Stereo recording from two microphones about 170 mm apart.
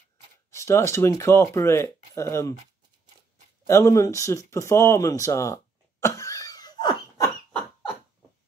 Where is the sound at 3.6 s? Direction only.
20° left (ahead or behind).